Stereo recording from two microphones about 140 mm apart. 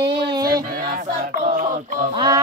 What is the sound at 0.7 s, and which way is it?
Music, 85° right.